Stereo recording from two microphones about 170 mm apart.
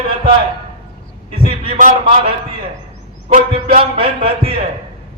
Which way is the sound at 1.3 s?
35° right (ahead or behind).